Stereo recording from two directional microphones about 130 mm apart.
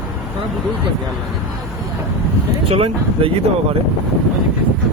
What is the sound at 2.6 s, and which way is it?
Speech, 45° right (ahead or behind).